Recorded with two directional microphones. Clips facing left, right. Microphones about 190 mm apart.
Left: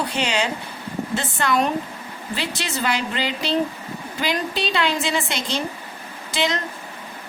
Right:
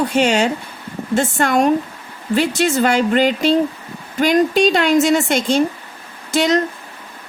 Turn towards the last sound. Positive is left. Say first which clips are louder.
# right 7 dB
turn(degrees=-45)  # may be behind; listen again after turning